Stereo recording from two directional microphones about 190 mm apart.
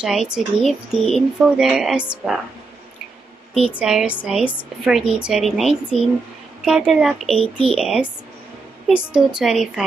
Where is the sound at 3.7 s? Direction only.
5° right (ahead or behind).